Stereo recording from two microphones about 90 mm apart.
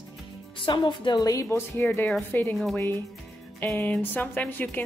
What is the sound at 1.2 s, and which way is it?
Speech, 35° left (ahead or behind).